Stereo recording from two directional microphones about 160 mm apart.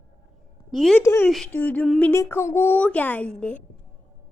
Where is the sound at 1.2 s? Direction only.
5° left (ahead or behind).